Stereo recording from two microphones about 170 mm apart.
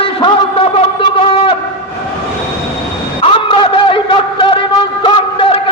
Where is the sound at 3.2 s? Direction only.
30° left (ahead or behind).